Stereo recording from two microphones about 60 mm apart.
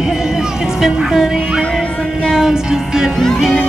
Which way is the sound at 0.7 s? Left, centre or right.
Centre.